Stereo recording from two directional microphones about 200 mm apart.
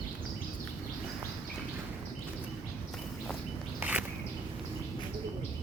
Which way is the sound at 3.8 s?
5° right (ahead or behind).